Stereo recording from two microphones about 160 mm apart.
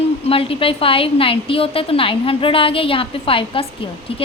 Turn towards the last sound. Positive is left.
turn(degrees=35)  # may be behind; listen again after turning